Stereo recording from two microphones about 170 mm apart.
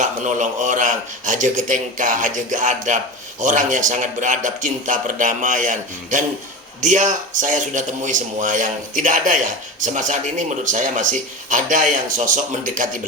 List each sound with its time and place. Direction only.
0.0 s speech: 45° right (ahead or behind)